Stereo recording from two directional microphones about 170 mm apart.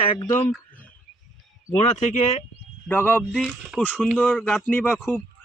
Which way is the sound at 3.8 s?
10° left (ahead or behind).